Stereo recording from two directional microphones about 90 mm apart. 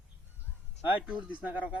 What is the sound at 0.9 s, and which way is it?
Speech, 15° right (ahead or behind).